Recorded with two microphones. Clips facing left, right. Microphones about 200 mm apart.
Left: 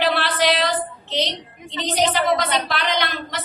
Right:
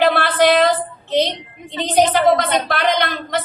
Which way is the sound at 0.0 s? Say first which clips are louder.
Right 6 dB; 50° right (ahead or behind).